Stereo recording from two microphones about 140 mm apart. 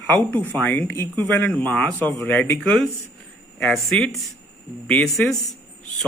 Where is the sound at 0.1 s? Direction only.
10° left (ahead or behind).